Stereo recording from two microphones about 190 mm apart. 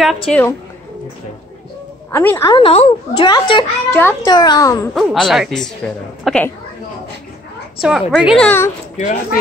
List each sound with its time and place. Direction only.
0.3 s a woman's voice: 10° left (ahead or behind)
2.0 s a woman's voice: 10° left (ahead or behind)
2.5 s a woman's voice: 30° left (ahead or behind)
3.9 s a woman's voice: 10° left (ahead or behind)
4.3 s a woman's voice: 20° left (ahead or behind)
4.9 s a woman's voice: centre (ahead or behind)
7.8 s speech: centre (ahead or behind)
8.5 s a woman's voice: 10° left (ahead or behind)
8.9 s speech: 40° left (ahead or behind)